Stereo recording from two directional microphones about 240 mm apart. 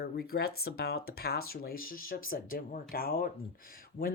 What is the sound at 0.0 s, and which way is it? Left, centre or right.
Speech, left.